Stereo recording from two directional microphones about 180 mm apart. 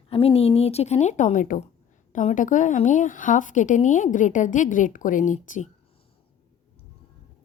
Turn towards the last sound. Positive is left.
turn(degrees=45)  # may be behind; listen again after turning